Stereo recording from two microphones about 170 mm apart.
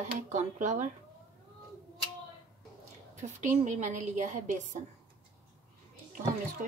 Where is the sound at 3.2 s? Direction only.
45° right (ahead or behind).